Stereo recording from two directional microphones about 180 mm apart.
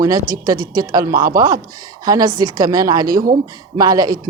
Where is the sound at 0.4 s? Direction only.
20° right (ahead or behind).